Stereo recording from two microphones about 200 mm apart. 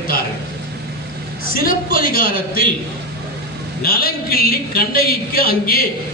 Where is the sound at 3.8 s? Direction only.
50° left (ahead or behind).